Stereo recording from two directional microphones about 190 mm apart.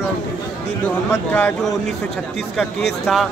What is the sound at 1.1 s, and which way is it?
Speech, 10° left (ahead or behind).